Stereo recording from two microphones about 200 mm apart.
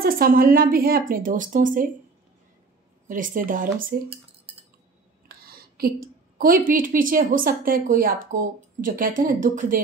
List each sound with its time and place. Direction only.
0.0 s a woman's voice: 45° right (ahead or behind)
3.1 s a woman's voice: 40° right (ahead or behind)
5.4 s a woman's voice: 50° right (ahead or behind)